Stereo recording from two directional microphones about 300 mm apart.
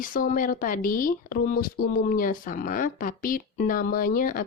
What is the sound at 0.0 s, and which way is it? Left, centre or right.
Speech, left.